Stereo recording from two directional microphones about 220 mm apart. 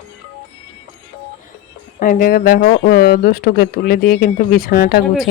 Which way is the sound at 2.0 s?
40° left (ahead or behind).